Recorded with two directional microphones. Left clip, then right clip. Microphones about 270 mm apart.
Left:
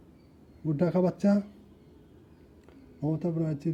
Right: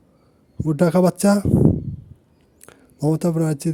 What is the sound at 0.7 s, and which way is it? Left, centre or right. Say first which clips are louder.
Speech: right 10 dB; right.